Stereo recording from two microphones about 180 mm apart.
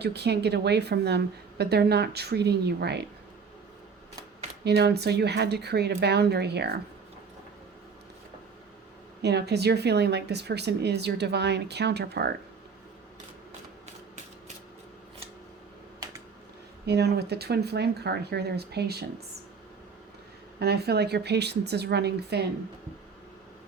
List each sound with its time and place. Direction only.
0.0 s speech: 65° right (ahead or behind)
4.6 s speech: 65° right (ahead or behind)
9.2 s speech: 65° right (ahead or behind)
16.8 s speech: 65° right (ahead or behind)
20.6 s speech: 65° right (ahead or behind)